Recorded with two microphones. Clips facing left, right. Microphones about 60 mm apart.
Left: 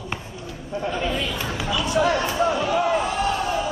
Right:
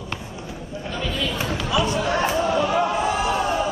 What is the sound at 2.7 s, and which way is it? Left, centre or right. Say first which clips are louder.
Music: even; centre.